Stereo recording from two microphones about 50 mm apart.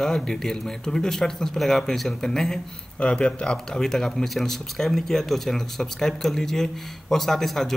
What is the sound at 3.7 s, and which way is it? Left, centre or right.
Speech, centre.